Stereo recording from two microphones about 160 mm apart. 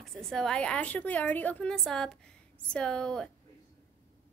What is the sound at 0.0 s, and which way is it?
A woman's voice, centre (ahead or behind).